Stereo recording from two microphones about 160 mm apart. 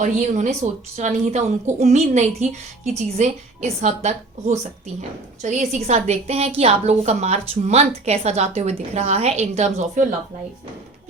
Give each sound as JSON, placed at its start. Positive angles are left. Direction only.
{"t": 0.0, "sound": "a woman's voice", "side_deg": -50}